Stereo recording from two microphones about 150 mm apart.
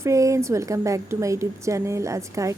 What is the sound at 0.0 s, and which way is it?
A woman's voice, 20° right (ahead or behind).